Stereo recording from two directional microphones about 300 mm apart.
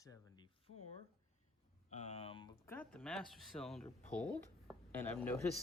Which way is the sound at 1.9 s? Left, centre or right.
Left.